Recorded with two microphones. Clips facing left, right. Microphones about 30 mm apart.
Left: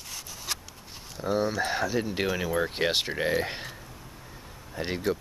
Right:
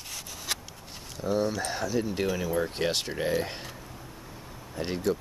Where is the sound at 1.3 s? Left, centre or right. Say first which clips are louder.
Left 2 dB; centre.